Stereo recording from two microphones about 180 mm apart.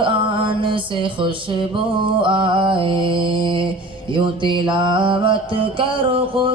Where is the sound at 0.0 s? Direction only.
30° right (ahead or behind).